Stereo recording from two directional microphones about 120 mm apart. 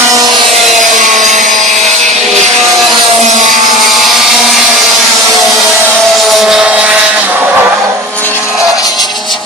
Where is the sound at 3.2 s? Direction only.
90° right.